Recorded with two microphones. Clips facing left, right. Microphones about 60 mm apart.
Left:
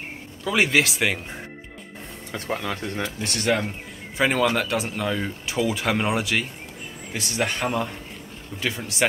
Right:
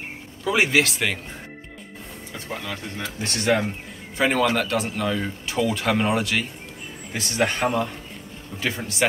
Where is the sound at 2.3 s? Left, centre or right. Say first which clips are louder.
Left 4 dB; left.